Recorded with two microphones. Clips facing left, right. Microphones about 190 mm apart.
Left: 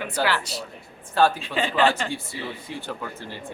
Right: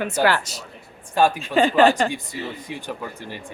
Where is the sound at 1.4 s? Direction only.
45° right (ahead or behind).